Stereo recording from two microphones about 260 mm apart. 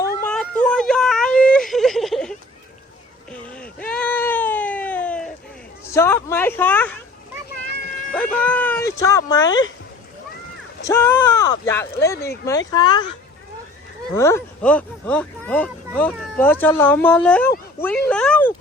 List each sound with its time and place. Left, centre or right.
0.3 s a sound: centre
3.5 s cat: centre
5.9 s a sound: centre
8.1 s speech: centre
10.8 s speech: centre
14.1 s speech: centre